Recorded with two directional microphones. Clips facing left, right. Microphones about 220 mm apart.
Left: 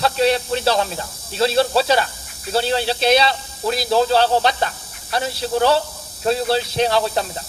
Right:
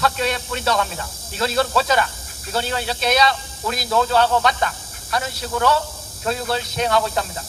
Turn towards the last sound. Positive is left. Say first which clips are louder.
# left 2 dB
turn(degrees=30)  # may be behind; listen again after turning